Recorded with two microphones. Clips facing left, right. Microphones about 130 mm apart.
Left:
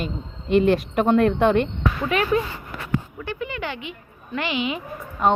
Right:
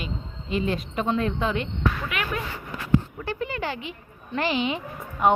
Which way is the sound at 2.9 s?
35° right (ahead or behind).